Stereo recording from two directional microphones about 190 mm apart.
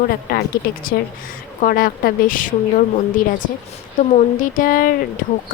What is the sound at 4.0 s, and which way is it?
Speech, 45° left (ahead or behind).